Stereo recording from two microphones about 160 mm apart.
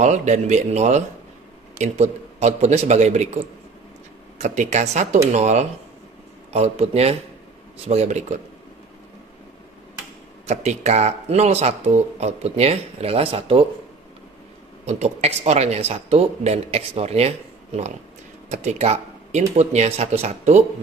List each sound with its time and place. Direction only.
0.0 s speech: 45° right (ahead or behind)
4.4 s speech: 45° right (ahead or behind)
10.4 s speech: 45° right (ahead or behind)
14.9 s speech: 40° right (ahead or behind)